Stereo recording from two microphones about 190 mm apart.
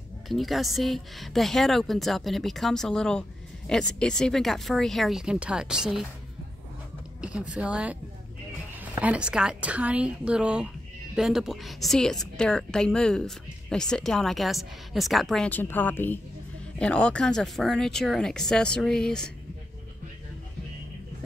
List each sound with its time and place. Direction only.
0.3 s a woman's voice: centre (ahead or behind)
7.2 s a woman's voice: 5° right (ahead or behind)
9.0 s a woman's voice: 5° right (ahead or behind)